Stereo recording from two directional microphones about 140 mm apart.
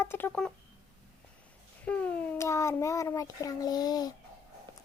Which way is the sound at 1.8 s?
10° left (ahead or behind).